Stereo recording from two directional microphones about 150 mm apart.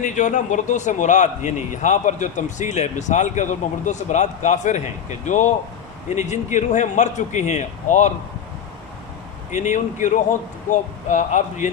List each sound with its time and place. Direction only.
0.0 s a man's voice: 55° left (ahead or behind)
9.5 s speech: 55° left (ahead or behind)